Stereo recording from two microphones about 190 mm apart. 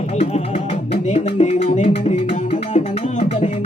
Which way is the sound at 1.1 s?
35° left (ahead or behind).